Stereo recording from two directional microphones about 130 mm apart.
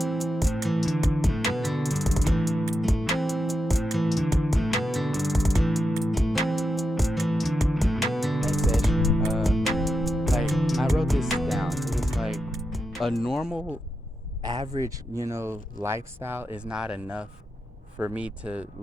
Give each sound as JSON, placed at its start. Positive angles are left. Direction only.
{"t": 0.0, "sound": "music", "side_deg": 0}
{"t": 14.4, "sound": "a sound", "side_deg": -35}
{"t": 14.8, "sound": "speech", "side_deg": -25}